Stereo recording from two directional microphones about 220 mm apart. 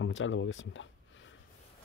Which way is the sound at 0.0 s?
60° left (ahead or behind).